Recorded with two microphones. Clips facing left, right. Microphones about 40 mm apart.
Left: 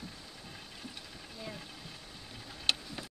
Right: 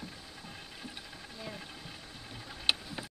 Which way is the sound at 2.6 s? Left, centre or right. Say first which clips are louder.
Right 1 dB; centre.